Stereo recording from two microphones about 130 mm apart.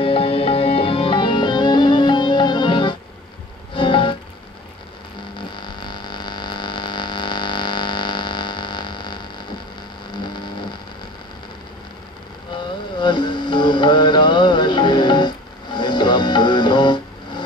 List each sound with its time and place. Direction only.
0.0 s music: 45° left (ahead or behind)
5.6 s mains hum: 35° left (ahead or behind)
10.2 s a sound: 35° left (ahead or behind)
12.5 s music: 35° left (ahead or behind)